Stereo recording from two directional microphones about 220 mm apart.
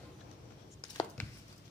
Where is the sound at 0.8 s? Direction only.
15° left (ahead or behind).